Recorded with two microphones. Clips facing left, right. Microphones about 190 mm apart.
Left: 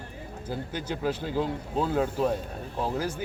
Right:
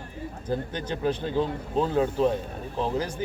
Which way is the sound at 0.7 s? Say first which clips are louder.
Right 2 dB; 10° left (ahead or behind).